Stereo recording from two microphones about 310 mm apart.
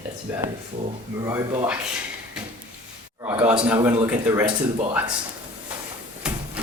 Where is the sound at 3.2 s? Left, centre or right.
Centre.